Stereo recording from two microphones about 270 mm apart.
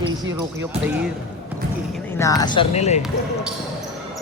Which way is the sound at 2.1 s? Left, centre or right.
Centre.